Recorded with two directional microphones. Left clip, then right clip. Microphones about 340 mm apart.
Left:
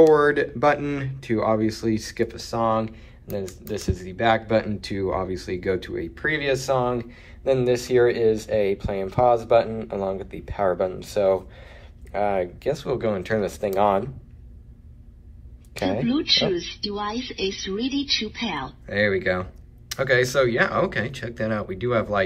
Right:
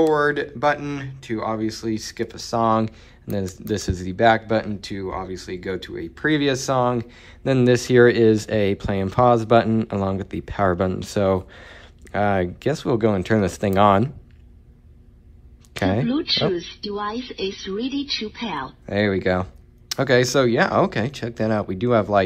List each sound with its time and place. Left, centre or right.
0.0 s speech: centre; by 14.0 s right
16.1 s speech: centre